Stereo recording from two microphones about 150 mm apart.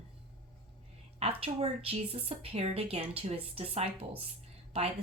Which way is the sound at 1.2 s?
40° right (ahead or behind).